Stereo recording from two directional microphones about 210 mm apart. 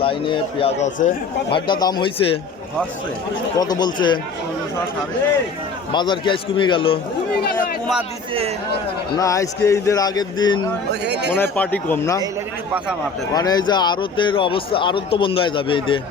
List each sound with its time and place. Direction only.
0.0 s a man's voice: 25° left (ahead or behind)
3.6 s a man's voice: 20° left (ahead or behind)
5.9 s a man's voice: 20° left (ahead or behind)
7.5 s a sound: centre (ahead or behind)
9.1 s a man's voice: 15° left (ahead or behind)
11.0 s speech: 55° right (ahead or behind)
11.5 s a man's voice: 5° left (ahead or behind)
13.3 s a man's voice: 20° left (ahead or behind)